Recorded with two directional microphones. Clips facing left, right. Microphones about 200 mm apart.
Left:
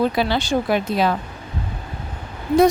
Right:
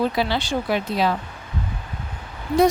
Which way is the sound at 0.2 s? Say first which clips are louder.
Left 3 dB; 45° left (ahead or behind).